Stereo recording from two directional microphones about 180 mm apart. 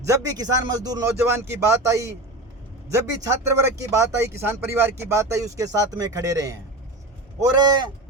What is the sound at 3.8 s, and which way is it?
A man's voice, 15° right (ahead or behind).